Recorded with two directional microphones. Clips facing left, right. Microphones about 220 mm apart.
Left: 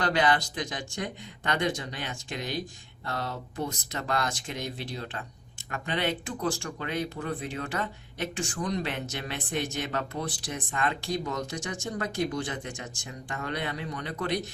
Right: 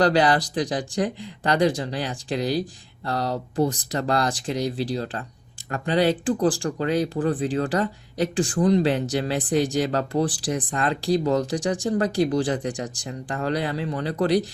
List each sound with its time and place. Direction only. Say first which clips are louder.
0.0 s speech: right 7 dB; 35° right (ahead or behind)